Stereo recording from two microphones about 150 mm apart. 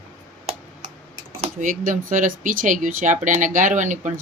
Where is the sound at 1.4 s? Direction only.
60° right (ahead or behind).